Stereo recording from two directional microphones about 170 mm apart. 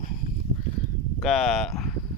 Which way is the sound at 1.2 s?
Centre (ahead or behind).